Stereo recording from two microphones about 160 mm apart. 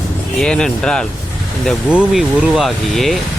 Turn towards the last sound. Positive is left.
turn(degrees=0)  # may be behind; listen again after turning